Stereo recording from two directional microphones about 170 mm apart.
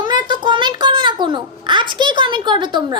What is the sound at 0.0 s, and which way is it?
A child's voice, 25° right (ahead or behind).